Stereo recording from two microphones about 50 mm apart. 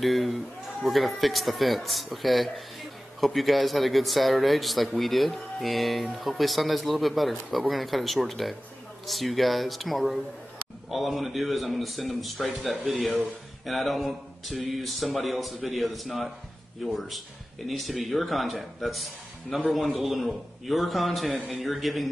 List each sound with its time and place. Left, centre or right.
0.0 s a man's voice: centre